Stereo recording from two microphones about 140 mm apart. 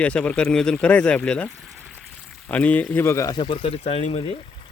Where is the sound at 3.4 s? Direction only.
40° left (ahead or behind).